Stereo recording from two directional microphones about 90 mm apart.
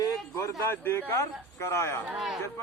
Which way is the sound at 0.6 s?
25° left (ahead or behind).